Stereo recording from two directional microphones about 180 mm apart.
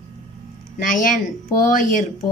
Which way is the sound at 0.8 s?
45° left (ahead or behind).